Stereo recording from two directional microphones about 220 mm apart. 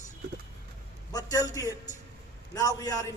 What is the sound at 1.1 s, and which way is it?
Speech, 15° left (ahead or behind).